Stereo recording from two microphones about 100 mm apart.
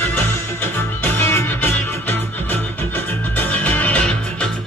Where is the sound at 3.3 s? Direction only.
15° left (ahead or behind).